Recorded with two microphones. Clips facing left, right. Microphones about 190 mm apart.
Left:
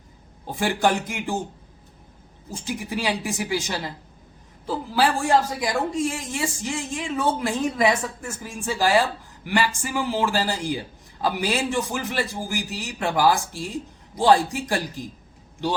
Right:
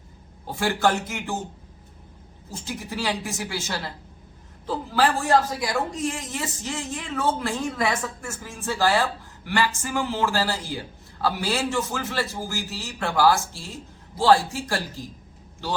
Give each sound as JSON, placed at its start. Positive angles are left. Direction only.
{"t": 0.4, "sound": "a woman's voice", "side_deg": 15}
{"t": 2.5, "sound": "a woman's voice", "side_deg": 15}